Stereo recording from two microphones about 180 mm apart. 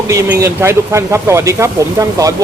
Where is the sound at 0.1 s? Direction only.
15° right (ahead or behind).